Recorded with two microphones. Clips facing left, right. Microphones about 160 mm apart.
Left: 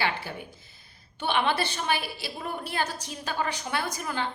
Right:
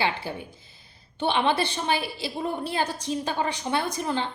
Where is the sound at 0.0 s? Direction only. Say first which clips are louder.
Right 3 dB; 20° right (ahead or behind).